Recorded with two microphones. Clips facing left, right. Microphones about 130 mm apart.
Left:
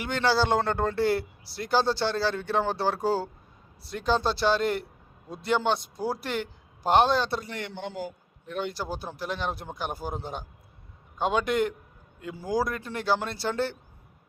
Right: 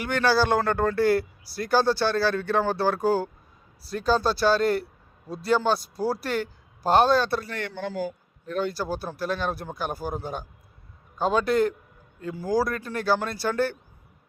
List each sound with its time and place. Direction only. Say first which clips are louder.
0.0 s a man's voice: right 2 dB; 20° left (ahead or behind)